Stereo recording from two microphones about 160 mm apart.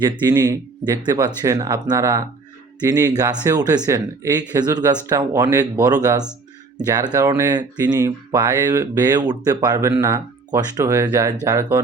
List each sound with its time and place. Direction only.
0.0 s speech: 20° right (ahead or behind)